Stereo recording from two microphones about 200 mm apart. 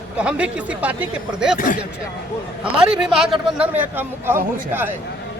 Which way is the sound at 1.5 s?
40° left (ahead or behind).